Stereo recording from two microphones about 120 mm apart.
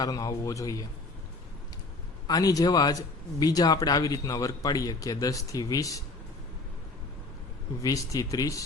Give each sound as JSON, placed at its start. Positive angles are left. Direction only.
{"t": 0.0, "sound": "speech", "side_deg": 30}
{"t": 2.2, "sound": "speech", "side_deg": 30}
{"t": 7.8, "sound": "speech", "side_deg": 30}